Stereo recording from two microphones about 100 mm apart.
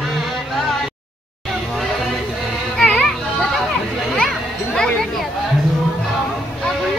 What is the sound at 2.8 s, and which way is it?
Children playing, 5° left (ahead or behind).